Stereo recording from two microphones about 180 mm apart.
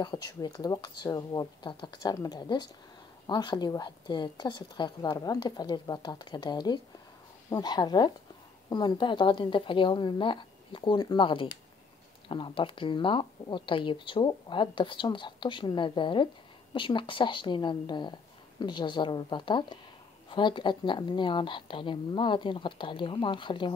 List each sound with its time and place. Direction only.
0.0 s speech: 20° left (ahead or behind)